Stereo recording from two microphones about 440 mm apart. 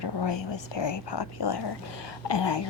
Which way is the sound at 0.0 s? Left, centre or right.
Left.